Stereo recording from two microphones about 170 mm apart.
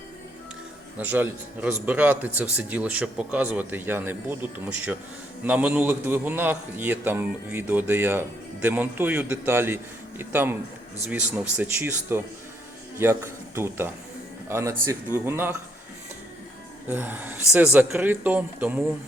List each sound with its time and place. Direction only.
0.9 s speech: 10° right (ahead or behind)
16.9 s speech: 10° right (ahead or behind)